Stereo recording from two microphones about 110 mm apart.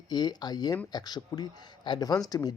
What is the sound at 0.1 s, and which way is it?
Speech, 40° left (ahead or behind).